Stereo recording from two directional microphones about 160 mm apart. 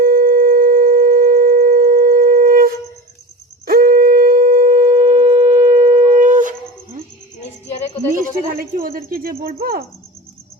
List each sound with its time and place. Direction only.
0.0 s sine wave: 65° right (ahead or behind)
3.7 s shofar: 65° right (ahead or behind)
7.7 s a sound: 40° left (ahead or behind)
8.2 s speech: 65° right (ahead or behind)